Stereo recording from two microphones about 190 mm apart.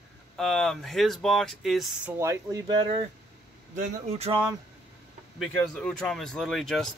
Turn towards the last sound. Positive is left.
turn(degrees=5)  # may be behind; listen again after turning